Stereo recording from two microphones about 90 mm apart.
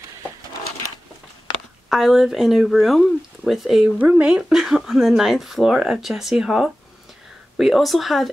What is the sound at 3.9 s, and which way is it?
Speech, 15° right (ahead or behind).